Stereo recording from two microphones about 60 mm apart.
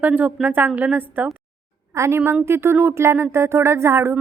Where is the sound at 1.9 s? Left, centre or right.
Right.